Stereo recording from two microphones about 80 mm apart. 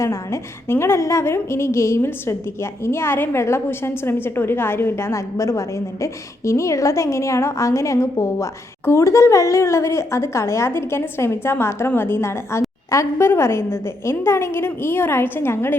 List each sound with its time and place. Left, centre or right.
0.0 s a woman's voice: left